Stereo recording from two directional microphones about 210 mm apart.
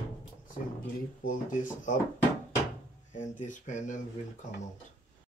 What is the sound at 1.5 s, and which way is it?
Speech, 40° left (ahead or behind).